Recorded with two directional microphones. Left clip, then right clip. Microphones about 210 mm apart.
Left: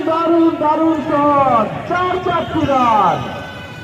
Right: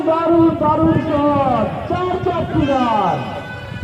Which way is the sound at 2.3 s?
25° left (ahead or behind).